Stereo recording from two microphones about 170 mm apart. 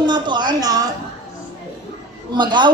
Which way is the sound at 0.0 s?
25° right (ahead or behind).